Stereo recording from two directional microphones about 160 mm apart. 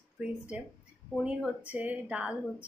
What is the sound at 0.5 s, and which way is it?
Speech, 5° right (ahead or behind).